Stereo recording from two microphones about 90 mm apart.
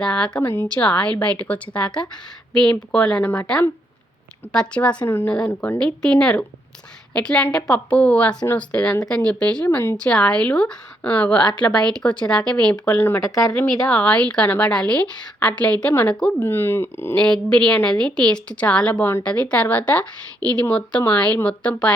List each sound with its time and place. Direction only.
0.0 s a woman's voice: 10° left (ahead or behind)
0.8 s a woman's voice: 15° left (ahead or behind)
4.7 s a woman's voice: 15° left (ahead or behind)
5.8 s a woman's voice: 10° left (ahead or behind)
9.6 s a woman's voice: 25° left (ahead or behind)
10.0 s a woman's voice: 10° left (ahead or behind)
17.2 s a woman's voice: 10° left (ahead or behind)